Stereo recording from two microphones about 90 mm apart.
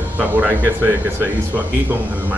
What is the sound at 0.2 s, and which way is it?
Speech, 20° right (ahead or behind).